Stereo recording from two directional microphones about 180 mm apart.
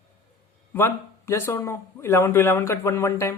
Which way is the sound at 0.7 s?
15° left (ahead or behind).